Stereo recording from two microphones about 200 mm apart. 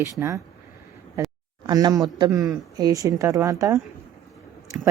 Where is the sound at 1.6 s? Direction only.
20° right (ahead or behind).